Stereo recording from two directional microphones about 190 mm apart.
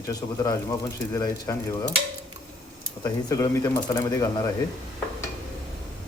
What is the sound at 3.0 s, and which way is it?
Speech, 15° left (ahead or behind).